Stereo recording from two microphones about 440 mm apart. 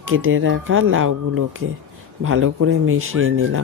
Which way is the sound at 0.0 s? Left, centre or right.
Right.